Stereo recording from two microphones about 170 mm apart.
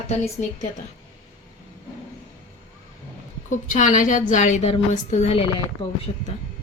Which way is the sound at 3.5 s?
50° left (ahead or behind).